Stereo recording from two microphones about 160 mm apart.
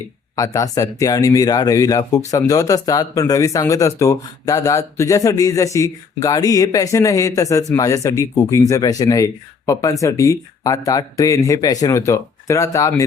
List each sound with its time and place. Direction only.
0.3 s speech: 20° left (ahead or behind)